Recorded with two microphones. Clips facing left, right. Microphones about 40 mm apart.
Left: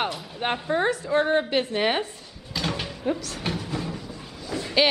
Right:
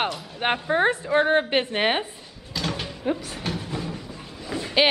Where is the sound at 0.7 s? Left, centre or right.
Right.